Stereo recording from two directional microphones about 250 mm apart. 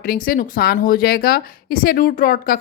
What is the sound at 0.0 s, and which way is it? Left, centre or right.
A woman's voice, left.